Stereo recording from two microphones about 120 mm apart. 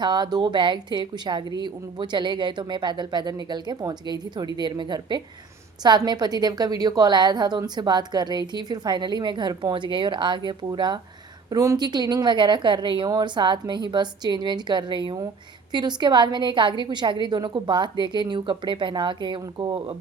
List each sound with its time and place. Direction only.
0.0 s a woman's voice: 35° right (ahead or behind)
11.4 s a woman's voice: 30° right (ahead or behind); by 20.0 s 45° right (ahead or behind)